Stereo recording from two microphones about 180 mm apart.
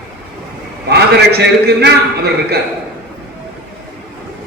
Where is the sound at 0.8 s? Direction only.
65° right (ahead or behind).